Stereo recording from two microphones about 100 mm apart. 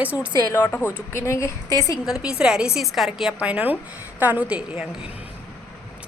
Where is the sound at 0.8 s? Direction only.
25° left (ahead or behind).